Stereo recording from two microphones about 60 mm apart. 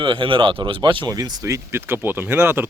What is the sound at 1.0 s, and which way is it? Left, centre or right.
Speech, right.